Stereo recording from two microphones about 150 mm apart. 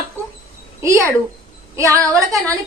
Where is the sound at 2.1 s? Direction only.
20° right (ahead or behind).